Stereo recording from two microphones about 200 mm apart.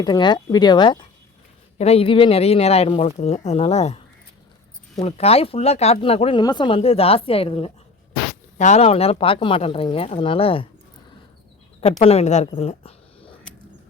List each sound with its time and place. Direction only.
0.0 s speech: 20° left (ahead or behind)
5.0 s speech: 30° left (ahead or behind)
11.8 s speech: 30° left (ahead or behind)
12.5 s a sound: 30° left (ahead or behind)